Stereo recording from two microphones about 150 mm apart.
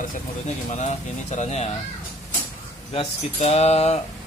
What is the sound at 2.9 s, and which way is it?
Speech, 45° left (ahead or behind).